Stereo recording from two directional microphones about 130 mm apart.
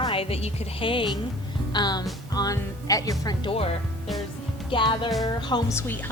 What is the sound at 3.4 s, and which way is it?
Speech, 50° left (ahead or behind).